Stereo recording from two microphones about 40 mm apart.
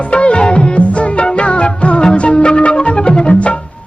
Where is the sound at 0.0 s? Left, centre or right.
Left.